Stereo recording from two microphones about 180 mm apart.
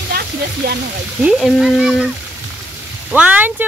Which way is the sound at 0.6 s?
60° right (ahead or behind).